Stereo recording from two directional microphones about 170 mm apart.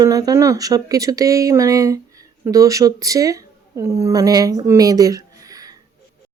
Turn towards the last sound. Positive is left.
turn(degrees=-20)  # may be behind; listen again after turning